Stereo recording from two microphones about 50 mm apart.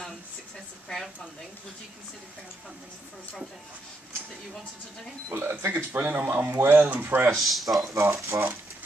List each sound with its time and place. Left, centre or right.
0.8 s speech: centre
5.3 s speech: right
7.3 s speech: centre
8.2 s speech: right